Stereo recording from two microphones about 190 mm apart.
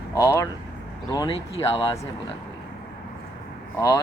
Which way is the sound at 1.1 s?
25° left (ahead or behind).